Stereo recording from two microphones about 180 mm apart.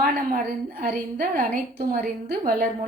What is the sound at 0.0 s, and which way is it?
A woman's voice, 55° right (ahead or behind).